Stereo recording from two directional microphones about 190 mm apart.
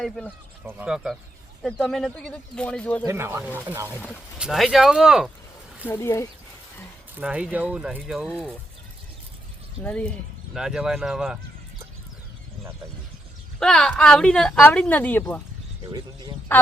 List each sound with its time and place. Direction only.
0.6 s a woman's voice: 10° right (ahead or behind)
3.1 s a woman's voice: 15° right (ahead or behind)
5.9 s speech: 15° left (ahead or behind)
7.2 s a woman's voice: 5° right (ahead or behind)
9.8 s a woman's voice: 5° left (ahead or behind)
13.6 s a woman's voice: 5° left (ahead or behind)
15.8 s speech: 20° right (ahead or behind)